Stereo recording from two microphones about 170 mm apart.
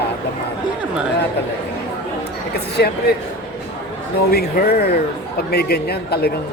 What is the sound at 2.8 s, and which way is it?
Speech, 70° left (ahead or behind).